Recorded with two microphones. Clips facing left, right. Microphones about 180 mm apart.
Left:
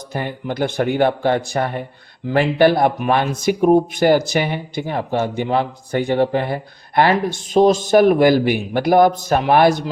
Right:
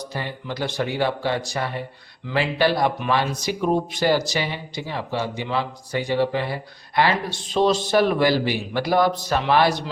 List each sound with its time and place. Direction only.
0.1 s speech: 50° left (ahead or behind)